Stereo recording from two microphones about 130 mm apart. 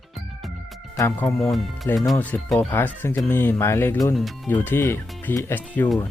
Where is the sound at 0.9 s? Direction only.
20° left (ahead or behind).